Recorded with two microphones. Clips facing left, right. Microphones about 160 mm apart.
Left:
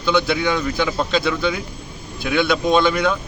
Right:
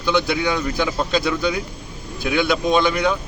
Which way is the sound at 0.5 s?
10° right (ahead or behind).